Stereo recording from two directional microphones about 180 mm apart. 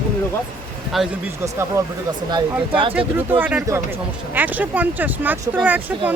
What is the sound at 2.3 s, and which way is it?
Speech, 30° right (ahead or behind).